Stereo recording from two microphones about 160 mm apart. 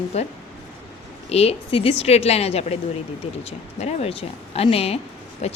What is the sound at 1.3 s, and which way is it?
A woman's voice, 40° left (ahead or behind).